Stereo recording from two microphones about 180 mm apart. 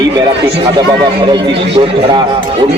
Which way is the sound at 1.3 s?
25° right (ahead or behind).